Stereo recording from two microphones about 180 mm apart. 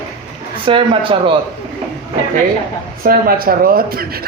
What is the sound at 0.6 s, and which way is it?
Speech, 30° right (ahead or behind).